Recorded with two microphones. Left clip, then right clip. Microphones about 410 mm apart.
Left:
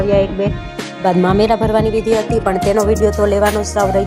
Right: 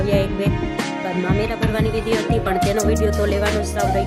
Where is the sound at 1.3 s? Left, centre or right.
Right.